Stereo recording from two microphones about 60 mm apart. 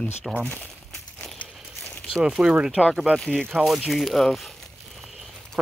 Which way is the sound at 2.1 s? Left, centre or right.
Centre.